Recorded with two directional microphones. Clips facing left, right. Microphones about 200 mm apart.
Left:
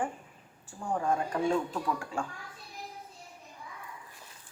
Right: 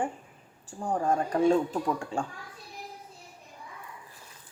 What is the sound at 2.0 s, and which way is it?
Speech, 30° right (ahead or behind).